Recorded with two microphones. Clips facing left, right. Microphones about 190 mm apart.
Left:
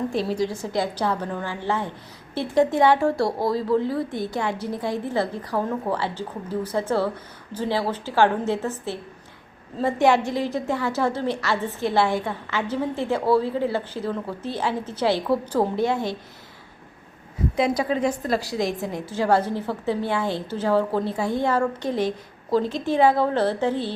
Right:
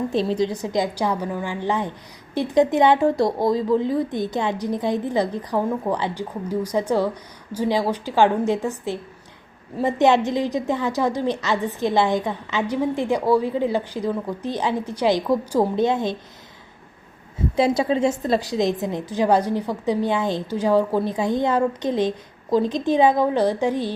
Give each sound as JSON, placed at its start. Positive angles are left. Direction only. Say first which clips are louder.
{"t": 0.1, "sound": "a woman's voice", "louder": "right 3 dB", "side_deg": -20}
{"t": 17.6, "sound": "a woman's voice", "louder": "right 3 dB", "side_deg": -25}